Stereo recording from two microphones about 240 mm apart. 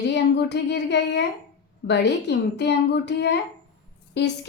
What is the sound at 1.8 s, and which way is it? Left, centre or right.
A woman's voice, left.